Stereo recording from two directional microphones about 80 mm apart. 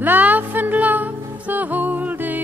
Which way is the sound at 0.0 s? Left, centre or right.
Right.